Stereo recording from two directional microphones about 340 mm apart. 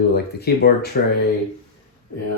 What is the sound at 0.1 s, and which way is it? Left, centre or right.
Speech, left.